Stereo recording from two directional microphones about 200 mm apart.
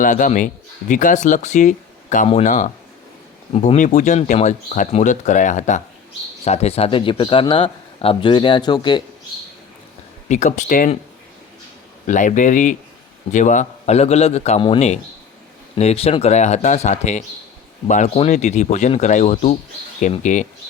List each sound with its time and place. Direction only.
0.0 s a man's voice: 40° left (ahead or behind); by 9.0 s 25° left (ahead or behind)
10.2 s speech: 35° left (ahead or behind)
12.0 s speech: 40° left (ahead or behind)